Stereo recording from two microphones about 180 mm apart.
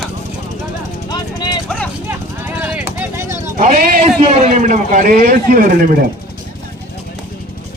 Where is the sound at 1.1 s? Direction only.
20° left (ahead or behind).